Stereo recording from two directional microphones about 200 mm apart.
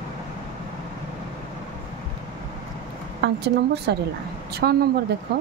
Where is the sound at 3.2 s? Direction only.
60° right (ahead or behind).